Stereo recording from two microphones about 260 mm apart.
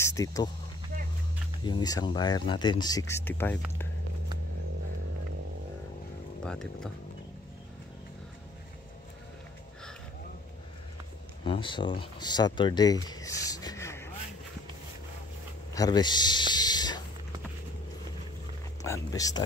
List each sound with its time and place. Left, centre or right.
0.0 s speech: centre
1.6 s speech: centre
6.4 s speech: centre
11.4 s speech: centre
15.7 s a sound: centre
18.8 s speech: centre